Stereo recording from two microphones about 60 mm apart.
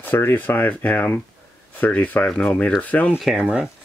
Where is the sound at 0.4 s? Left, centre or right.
Left.